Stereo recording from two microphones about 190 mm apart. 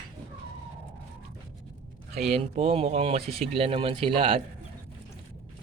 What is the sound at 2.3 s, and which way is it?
Speech, 30° right (ahead or behind).